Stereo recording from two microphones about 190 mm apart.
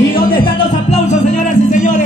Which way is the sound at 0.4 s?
35° left (ahead or behind).